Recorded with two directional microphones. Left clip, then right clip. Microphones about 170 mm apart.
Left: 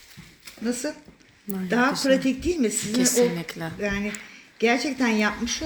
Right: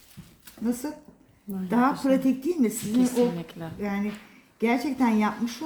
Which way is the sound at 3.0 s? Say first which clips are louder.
Left 3 dB; centre (ahead or behind).